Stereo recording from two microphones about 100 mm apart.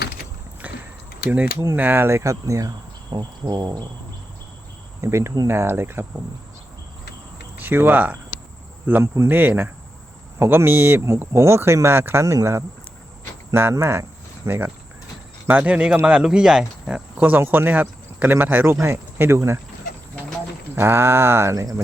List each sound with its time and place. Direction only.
0.6 s a sound: 15° right (ahead or behind)
1.7 s speech: 20° right (ahead or behind); by 3.8 s 40° right (ahead or behind)
4.9 s speech: 30° right (ahead or behind)
7.5 s speech: 20° right (ahead or behind)
17.2 s speech: 20° right (ahead or behind)
20.7 s speech: 25° right (ahead or behind)